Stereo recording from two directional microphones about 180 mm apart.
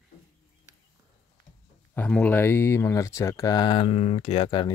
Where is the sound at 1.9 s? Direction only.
5° left (ahead or behind).